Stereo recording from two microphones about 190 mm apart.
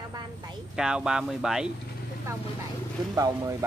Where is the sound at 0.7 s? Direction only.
5° right (ahead or behind).